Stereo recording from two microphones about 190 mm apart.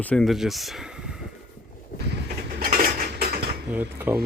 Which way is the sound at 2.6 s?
50° right (ahead or behind).